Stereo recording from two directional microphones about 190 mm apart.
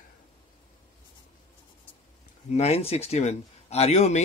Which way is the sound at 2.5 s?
30° left (ahead or behind).